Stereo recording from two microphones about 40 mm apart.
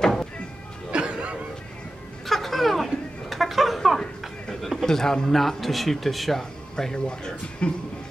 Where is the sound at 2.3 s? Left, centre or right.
Centre.